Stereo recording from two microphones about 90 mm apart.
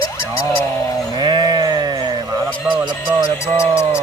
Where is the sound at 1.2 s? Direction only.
50° right (ahead or behind).